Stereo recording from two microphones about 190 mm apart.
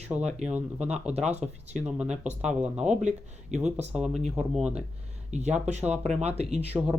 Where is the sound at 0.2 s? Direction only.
35° right (ahead or behind).